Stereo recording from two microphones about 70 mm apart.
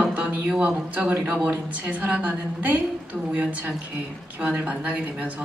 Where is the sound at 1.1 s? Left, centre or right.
Right.